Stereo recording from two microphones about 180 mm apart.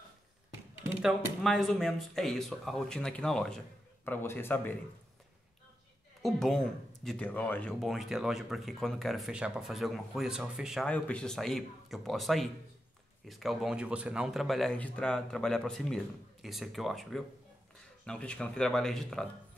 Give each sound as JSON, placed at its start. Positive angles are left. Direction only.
{"t": 1.0, "sound": "speech", "side_deg": 0}
{"t": 6.2, "sound": "speech", "side_deg": 0}